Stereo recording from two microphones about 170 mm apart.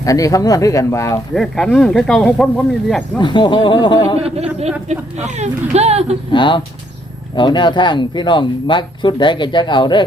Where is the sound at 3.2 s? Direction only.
25° left (ahead or behind).